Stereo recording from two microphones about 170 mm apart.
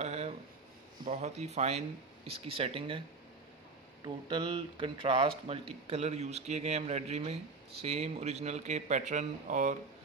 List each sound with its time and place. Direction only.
0.0 s a sound: 40° right (ahead or behind)
1.0 s speech: 40° right (ahead or behind)
4.0 s speech: 30° right (ahead or behind); by 9.8 s 50° right (ahead or behind)